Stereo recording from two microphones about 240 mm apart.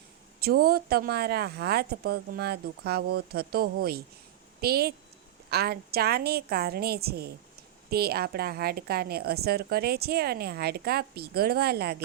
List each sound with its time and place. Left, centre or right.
0.3 s a woman's voice: right